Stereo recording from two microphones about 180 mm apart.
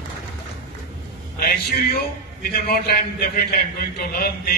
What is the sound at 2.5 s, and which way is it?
A man's voice, 60° left (ahead or behind).